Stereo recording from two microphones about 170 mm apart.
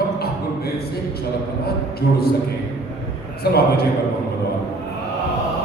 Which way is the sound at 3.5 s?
65° left (ahead or behind).